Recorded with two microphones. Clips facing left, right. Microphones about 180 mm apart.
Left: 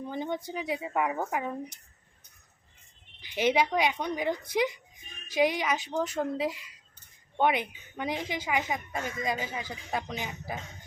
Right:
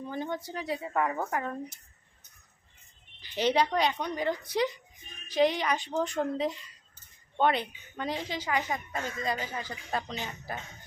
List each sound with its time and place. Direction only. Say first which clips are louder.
0.0 s speech: left 1 dB; 20° left (ahead or behind)
3.2 s speech: left 1 dB; 15° left (ahead or behind)
5.9 s a woman's voice: even; 5° right (ahead or behind)
6.3 s speech: even; 5° left (ahead or behind)